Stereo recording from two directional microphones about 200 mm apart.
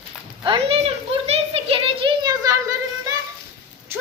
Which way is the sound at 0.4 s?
30° right (ahead or behind).